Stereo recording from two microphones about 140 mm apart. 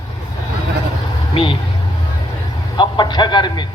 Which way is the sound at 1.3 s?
35° left (ahead or behind).